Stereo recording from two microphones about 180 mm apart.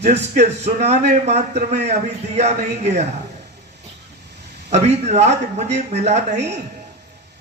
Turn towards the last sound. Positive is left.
turn(degrees=-40)  # may be behind; listen again after turning